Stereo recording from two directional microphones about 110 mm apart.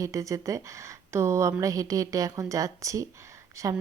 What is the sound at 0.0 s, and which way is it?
A woman's voice, 30° right (ahead or behind).